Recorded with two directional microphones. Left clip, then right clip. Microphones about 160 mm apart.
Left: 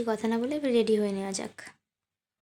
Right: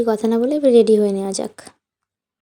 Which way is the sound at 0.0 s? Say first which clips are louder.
Right 11 dB; 30° right (ahead or behind).